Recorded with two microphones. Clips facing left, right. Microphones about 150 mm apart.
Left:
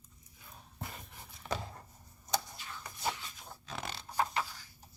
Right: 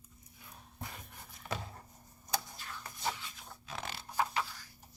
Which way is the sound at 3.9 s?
5° right (ahead or behind).